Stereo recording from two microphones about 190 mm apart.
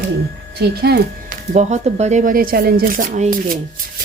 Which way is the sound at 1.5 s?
35° right (ahead or behind).